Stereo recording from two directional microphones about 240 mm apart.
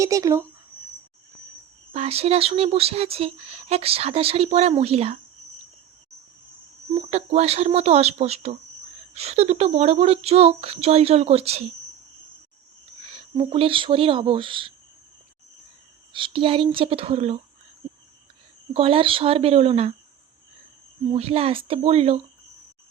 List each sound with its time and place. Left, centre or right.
0.0 s speech: centre
1.9 s speech: right
7.1 s speech: right
13.1 s speech: right
16.1 s speech: right
18.7 s speech: right
21.1 s speech: right